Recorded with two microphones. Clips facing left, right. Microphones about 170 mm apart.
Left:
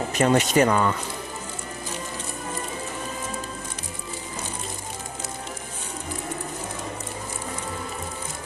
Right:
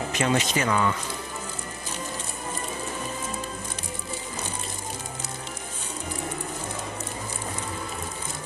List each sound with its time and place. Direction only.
0.2 s speech: 40° left (ahead or behind)